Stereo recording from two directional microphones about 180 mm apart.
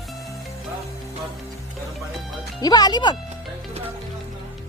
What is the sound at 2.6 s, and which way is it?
Speech, 20° left (ahead or behind).